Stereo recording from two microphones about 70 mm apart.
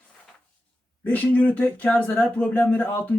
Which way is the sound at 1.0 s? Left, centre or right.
Left.